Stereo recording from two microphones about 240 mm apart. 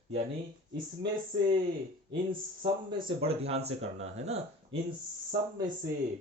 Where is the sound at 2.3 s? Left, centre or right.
Right.